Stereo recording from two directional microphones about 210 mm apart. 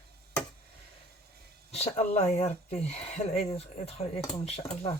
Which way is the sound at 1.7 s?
30° left (ahead or behind).